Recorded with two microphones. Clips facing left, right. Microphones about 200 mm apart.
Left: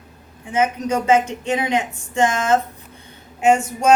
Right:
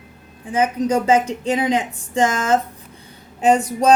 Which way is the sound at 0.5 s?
30° right (ahead or behind).